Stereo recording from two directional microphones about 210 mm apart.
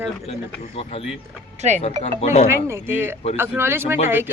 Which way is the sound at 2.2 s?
30° left (ahead or behind).